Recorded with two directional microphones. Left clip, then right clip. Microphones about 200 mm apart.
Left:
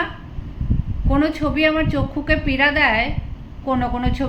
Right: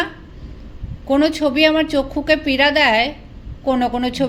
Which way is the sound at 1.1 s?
45° right (ahead or behind).